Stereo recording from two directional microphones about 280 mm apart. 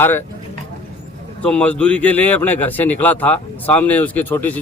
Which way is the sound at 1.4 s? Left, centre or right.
Centre.